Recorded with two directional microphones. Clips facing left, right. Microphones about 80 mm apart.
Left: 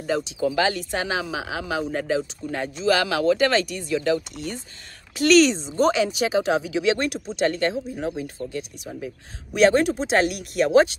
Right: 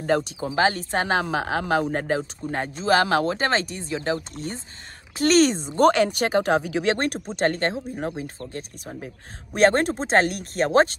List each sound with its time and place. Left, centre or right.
0.0 s speech: right
0.4 s speech: right